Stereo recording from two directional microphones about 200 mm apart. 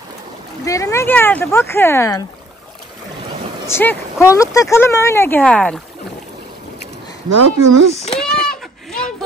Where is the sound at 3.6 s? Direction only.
10° left (ahead or behind).